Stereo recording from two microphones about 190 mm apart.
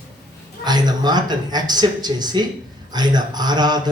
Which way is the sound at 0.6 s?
20° right (ahead or behind).